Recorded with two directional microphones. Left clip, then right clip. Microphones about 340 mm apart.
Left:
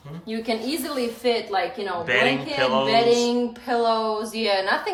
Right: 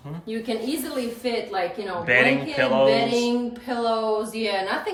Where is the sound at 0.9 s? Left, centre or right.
Centre.